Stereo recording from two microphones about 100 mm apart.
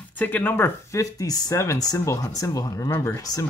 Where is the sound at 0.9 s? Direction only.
40° left (ahead or behind).